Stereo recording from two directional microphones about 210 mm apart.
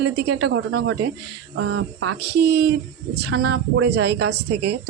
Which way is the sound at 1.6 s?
75° right (ahead or behind).